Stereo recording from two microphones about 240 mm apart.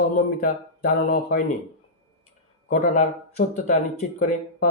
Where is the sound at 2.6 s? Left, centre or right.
Left.